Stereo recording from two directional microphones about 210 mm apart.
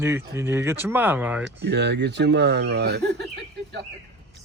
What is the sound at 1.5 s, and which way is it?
Speech, 55° right (ahead or behind).